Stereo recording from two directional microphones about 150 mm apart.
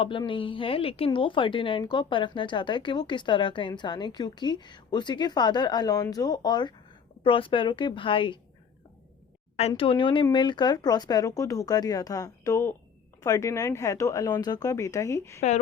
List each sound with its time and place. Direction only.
0.0 s a woman's voice: 35° left (ahead or behind)
9.6 s a woman's voice: 40° left (ahead or behind); by 15.4 s 20° left (ahead or behind)
15.4 s speech: 50° left (ahead or behind)